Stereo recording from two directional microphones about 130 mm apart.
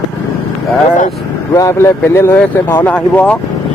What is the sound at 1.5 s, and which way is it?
Speech, 25° left (ahead or behind).